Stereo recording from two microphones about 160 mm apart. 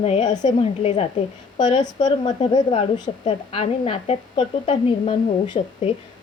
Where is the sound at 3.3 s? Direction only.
40° left (ahead or behind).